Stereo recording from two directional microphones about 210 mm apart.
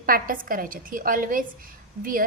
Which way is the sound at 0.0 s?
40° right (ahead or behind).